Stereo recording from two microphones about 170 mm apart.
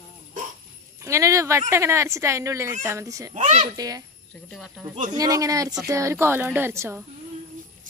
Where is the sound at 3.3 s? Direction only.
45° right (ahead or behind).